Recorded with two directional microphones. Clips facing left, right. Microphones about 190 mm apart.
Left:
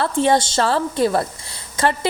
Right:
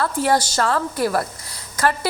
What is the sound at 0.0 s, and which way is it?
A woman's voice, 25° left (ahead or behind).